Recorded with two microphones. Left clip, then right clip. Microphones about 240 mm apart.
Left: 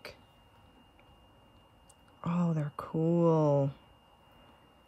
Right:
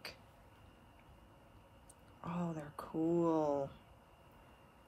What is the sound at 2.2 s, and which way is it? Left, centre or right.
Speech, left.